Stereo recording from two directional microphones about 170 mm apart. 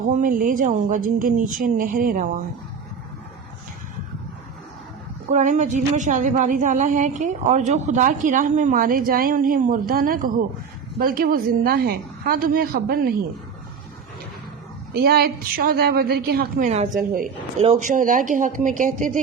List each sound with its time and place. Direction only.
0.0 s speech: 50° right (ahead or behind)
5.3 s a woman's voice: 45° right (ahead or behind); by 13.1 s 60° right (ahead or behind)
14.9 s a woman's voice: 65° right (ahead or behind)
16.6 s speech: 40° right (ahead or behind)
17.8 s speech: 50° right (ahead or behind)